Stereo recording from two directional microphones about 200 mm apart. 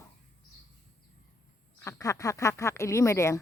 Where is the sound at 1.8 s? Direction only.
15° left (ahead or behind).